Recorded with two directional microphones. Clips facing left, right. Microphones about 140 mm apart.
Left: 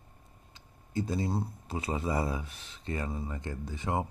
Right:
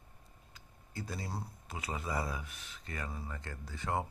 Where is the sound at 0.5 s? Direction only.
25° left (ahead or behind).